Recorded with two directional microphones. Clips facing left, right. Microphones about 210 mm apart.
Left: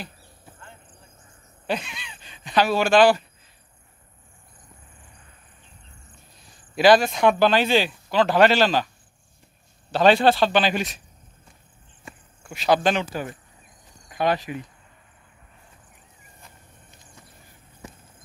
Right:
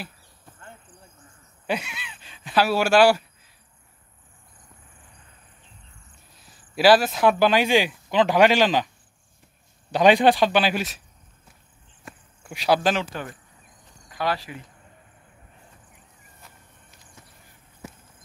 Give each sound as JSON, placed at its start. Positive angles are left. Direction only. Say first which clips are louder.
{"t": 1.7, "sound": "speech", "louder": "even", "side_deg": -10}
{"t": 6.3, "sound": "speech", "louder": "left 1 dB", "side_deg": -5}
{"t": 12.0, "sound": "a sound", "louder": "even", "side_deg": 0}
{"t": 12.5, "sound": "speech", "louder": "left 1 dB", "side_deg": -10}
{"t": 13.1, "sound": "speech", "louder": "left 3 dB", "side_deg": 5}
{"t": 14.0, "sound": "speech", "louder": "left 4 dB", "side_deg": 20}
{"t": 17.8, "sound": "a sound", "louder": "right 2 dB", "side_deg": -5}